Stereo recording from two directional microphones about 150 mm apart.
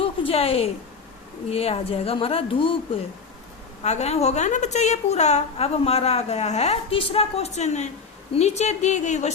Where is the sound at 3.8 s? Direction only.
50° left (ahead or behind).